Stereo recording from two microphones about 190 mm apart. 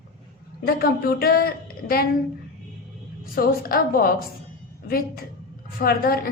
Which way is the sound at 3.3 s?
50° left (ahead or behind).